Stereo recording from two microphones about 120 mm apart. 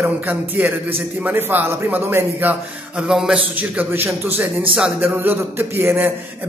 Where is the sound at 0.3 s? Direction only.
15° right (ahead or behind).